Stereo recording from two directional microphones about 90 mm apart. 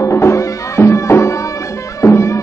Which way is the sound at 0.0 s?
30° left (ahead or behind).